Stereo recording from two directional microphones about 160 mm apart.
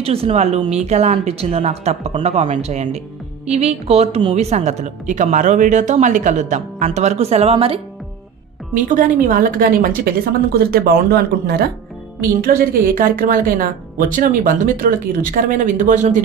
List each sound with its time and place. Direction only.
0.0 s a woman's voice: 40° right (ahead or behind)
8.8 s a woman's voice: 60° right (ahead or behind)